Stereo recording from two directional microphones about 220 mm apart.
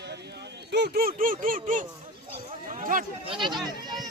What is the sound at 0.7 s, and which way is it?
Speech, 45° right (ahead or behind).